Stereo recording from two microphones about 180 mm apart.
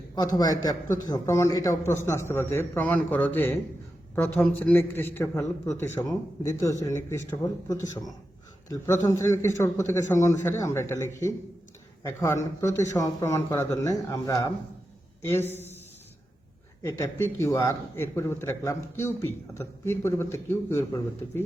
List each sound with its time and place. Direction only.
0.2 s a man's voice: 20° left (ahead or behind)
16.8 s a man's voice: 15° left (ahead or behind)